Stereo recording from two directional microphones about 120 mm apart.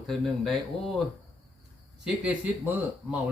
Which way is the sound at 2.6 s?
15° right (ahead or behind).